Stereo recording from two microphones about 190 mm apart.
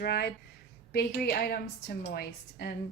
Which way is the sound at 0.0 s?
55° left (ahead or behind).